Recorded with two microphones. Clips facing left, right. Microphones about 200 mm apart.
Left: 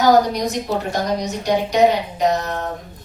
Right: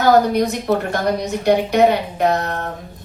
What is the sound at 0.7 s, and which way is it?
Speech, 55° right (ahead or behind).